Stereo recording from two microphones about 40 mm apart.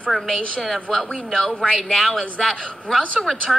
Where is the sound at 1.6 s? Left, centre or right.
Centre.